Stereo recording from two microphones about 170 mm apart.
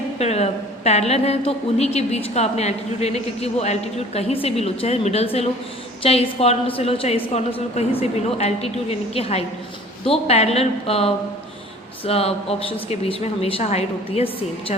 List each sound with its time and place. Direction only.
0.2 s speech: 40° left (ahead or behind)